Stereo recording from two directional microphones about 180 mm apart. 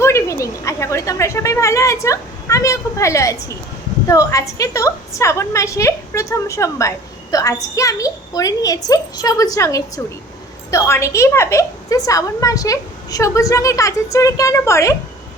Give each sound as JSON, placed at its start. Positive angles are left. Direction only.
{"t": 0.0, "sound": "a woman's voice", "side_deg": 15}